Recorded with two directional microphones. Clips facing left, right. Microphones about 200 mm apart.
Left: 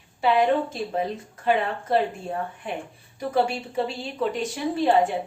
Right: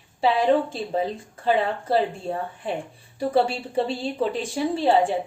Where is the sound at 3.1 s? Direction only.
30° right (ahead or behind).